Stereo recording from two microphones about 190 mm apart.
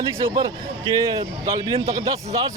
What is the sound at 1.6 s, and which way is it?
Speech, 30° right (ahead or behind).